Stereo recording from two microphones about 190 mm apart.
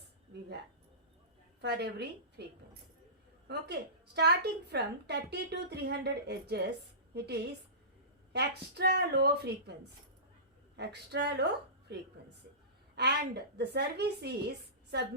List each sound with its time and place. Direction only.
1.6 s a woman's voice: 60° right (ahead or behind)
10.8 s a woman's voice: 60° right (ahead or behind)